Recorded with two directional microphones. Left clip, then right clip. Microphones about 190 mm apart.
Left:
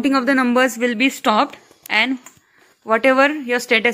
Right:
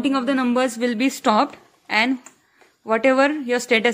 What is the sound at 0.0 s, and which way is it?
Speech, 20° left (ahead or behind).